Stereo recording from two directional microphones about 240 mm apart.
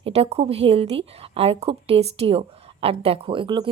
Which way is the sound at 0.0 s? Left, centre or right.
Right.